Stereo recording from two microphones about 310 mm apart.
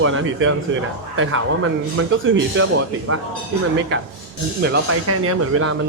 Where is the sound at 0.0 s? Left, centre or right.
Right.